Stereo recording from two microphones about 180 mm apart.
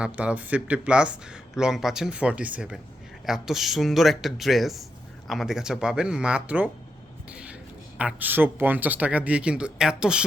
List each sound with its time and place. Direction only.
0.0 s a man's voice: 5° right (ahead or behind)
7.9 s speech: 10° right (ahead or behind)